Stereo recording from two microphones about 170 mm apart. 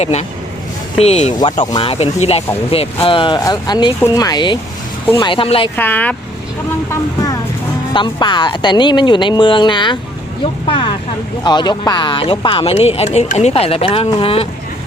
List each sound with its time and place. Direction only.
0.0 s speech: 40° left (ahead or behind)
1.4 s speech: 25° left (ahead or behind)
5.7 s speech: 10° left (ahead or behind)
7.9 s speech: 25° left (ahead or behind)